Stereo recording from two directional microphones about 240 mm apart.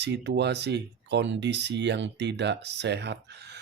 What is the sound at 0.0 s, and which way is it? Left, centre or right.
Speech, right.